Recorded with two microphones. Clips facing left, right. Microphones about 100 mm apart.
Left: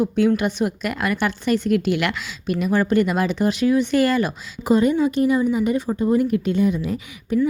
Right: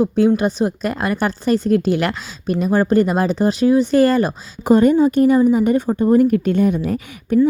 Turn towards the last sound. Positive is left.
turn(degrees=-50)  # may be behind; listen again after turning